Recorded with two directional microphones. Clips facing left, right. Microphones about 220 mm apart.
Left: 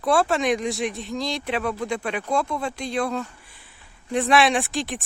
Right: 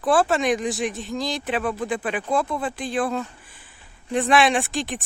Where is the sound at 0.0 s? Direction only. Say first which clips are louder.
Right 1 dB; centre (ahead or behind).